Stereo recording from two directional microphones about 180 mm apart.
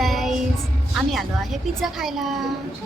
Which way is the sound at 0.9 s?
Centre (ahead or behind).